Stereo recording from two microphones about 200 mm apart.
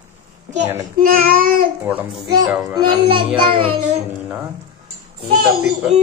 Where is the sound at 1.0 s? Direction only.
45° right (ahead or behind).